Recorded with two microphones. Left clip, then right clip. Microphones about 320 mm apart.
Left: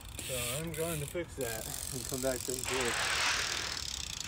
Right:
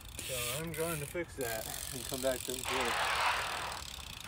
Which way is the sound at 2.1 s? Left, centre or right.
Right.